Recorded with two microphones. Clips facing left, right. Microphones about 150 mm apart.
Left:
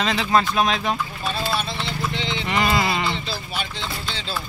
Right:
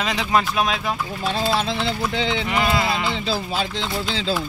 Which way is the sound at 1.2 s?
90° right.